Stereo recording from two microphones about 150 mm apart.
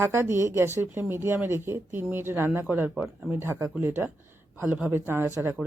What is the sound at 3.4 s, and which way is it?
A woman's voice, 15° right (ahead or behind).